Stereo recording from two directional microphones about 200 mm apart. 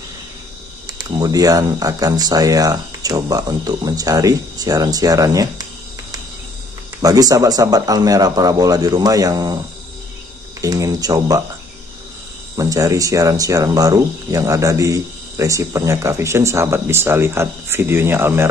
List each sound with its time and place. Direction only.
0.9 s speech: 20° right (ahead or behind)
7.0 s speech: 20° right (ahead or behind)
10.6 s speech: 15° right (ahead or behind)
12.5 s speech: 15° right (ahead or behind)